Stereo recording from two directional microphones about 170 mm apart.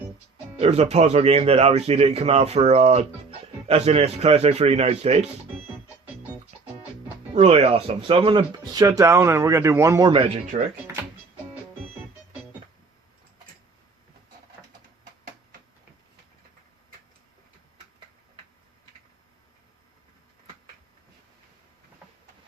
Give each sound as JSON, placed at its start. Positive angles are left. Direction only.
{"t": 0.6, "sound": "speech", "side_deg": -35}
{"t": 7.3, "sound": "speech", "side_deg": -35}
{"t": 10.1, "sound": "speech", "side_deg": -35}